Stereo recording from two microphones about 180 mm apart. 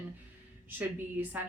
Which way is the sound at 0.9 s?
10° right (ahead or behind).